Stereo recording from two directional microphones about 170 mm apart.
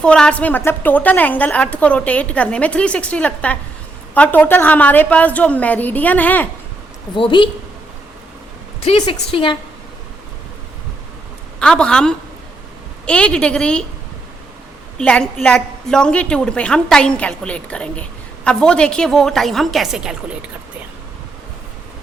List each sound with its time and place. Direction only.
0.0 s a woman's voice: 5° left (ahead or behind)
7.2 s a woman's voice: 30° left (ahead or behind)
8.8 s a woman's voice: 30° left (ahead or behind)
11.6 s a woman's voice: 5° left (ahead or behind)
14.9 s a woman's voice: 5° left (ahead or behind)